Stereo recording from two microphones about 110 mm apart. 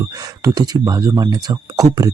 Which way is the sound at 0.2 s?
35° right (ahead or behind).